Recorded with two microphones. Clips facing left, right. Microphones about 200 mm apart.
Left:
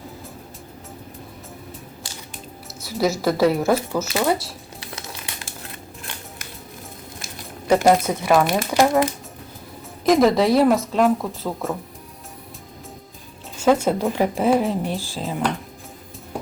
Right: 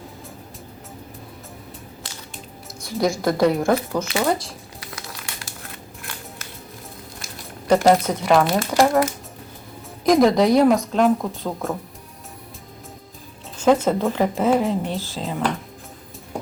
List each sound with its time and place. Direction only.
2.8 s speech: 5° left (ahead or behind)
4.8 s crumpling: 25° left (ahead or behind)
7.7 s speech: 10° left (ahead or behind)
10.1 s speech: centre (ahead or behind)
13.6 s speech: 10° left (ahead or behind)